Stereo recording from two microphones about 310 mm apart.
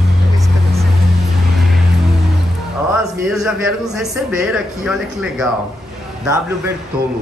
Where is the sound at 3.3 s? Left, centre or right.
Centre.